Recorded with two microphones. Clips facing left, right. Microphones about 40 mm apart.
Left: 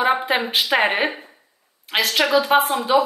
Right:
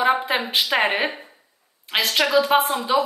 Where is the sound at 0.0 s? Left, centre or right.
Centre.